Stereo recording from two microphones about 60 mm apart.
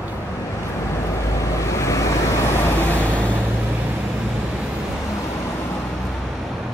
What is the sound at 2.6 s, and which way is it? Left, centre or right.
Vehicle, left.